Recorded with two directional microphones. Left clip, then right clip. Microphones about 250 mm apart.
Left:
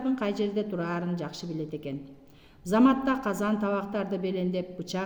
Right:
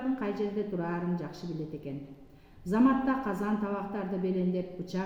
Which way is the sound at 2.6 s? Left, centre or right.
Left.